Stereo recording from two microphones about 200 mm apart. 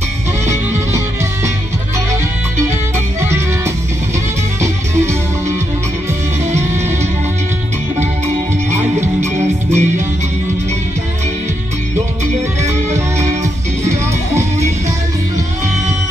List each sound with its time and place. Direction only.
0.5 s music: 15° right (ahead or behind)
3.2 s music: 15° right (ahead or behind)
9.2 s music: 35° right (ahead or behind)
12.9 s music: 15° right (ahead or behind)